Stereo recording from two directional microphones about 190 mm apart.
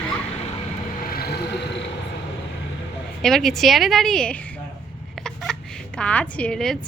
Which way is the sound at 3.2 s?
Centre (ahead or behind).